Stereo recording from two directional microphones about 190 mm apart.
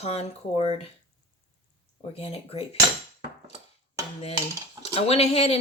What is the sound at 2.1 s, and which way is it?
Speech, 30° left (ahead or behind).